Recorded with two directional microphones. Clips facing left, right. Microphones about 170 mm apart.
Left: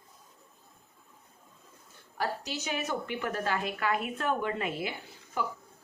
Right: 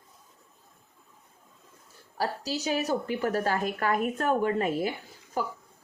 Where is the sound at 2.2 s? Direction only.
35° right (ahead or behind).